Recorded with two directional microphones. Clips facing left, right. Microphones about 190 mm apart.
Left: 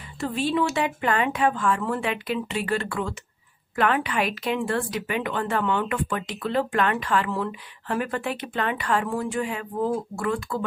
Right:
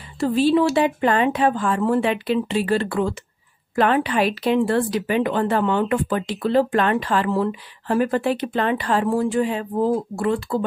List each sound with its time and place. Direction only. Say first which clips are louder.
0.2 s speech: right 7 dB; 35° right (ahead or behind)